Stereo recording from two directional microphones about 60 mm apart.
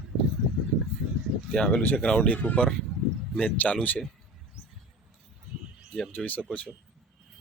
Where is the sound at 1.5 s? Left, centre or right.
Centre.